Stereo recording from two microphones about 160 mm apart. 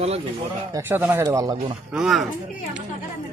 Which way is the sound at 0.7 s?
15° right (ahead or behind).